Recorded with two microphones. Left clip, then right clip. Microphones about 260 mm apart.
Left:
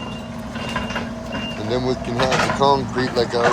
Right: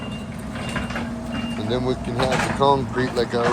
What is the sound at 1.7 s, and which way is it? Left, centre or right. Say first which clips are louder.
Vehicle: left 2 dB; centre.